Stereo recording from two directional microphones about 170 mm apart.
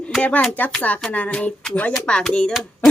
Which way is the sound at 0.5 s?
10° left (ahead or behind).